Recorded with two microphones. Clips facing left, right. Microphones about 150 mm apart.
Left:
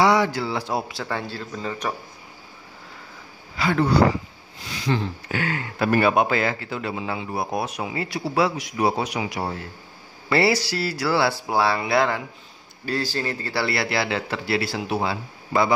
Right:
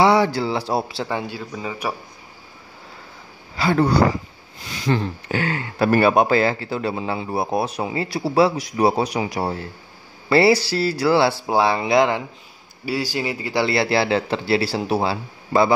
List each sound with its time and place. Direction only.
0.0 s speech: 30° right (ahead or behind)
1.0 s speech: 15° right (ahead or behind)
3.5 s a man's voice: 35° right (ahead or behind)
4.9 s a sound: 50° right (ahead or behind)
5.3 s a man's voice: 30° right (ahead or behind)